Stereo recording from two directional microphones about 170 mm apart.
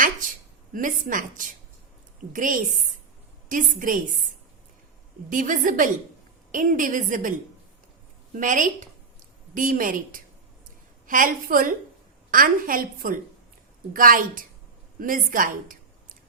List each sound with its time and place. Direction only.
0.0 s a sound: 50° right (ahead or behind)
2.3 s a woman's voice: 50° right (ahead or behind)
5.3 s a woman's voice: 50° right (ahead or behind)
8.4 s a woman's voice: 50° right (ahead or behind)